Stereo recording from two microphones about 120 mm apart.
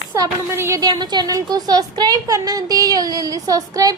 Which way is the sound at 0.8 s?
35° right (ahead or behind).